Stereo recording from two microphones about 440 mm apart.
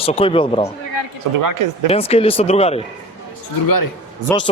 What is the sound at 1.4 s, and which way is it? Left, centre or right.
Speech, right.